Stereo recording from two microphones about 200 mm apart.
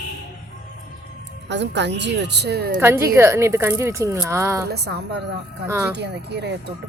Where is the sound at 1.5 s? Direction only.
60° right (ahead or behind).